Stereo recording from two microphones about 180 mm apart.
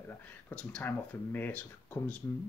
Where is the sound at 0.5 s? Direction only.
10° left (ahead or behind).